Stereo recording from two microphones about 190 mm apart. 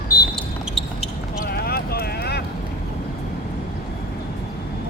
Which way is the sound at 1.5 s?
55° left (ahead or behind).